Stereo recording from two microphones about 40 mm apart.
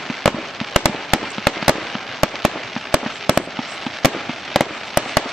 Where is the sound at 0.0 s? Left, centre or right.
Centre.